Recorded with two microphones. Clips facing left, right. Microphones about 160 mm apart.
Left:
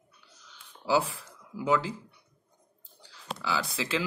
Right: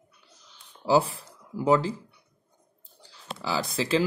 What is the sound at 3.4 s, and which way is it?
Speech, 40° right (ahead or behind).